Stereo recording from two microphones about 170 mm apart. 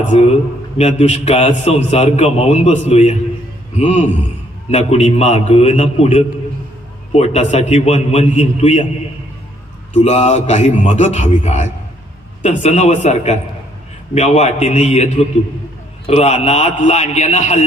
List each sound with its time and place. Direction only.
0.1 s a man's voice: 35° left (ahead or behind)
9.9 s a man's voice: 40° left (ahead or behind)